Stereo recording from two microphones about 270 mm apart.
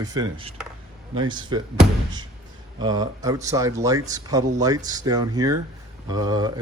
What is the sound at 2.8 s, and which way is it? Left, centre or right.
Speech, centre.